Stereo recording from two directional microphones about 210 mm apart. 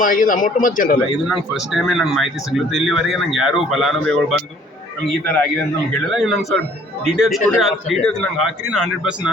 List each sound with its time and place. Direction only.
0.0 s a man's voice: 40° left (ahead or behind)
1.3 s speech: centre (ahead or behind)
5.9 s speech: centre (ahead or behind)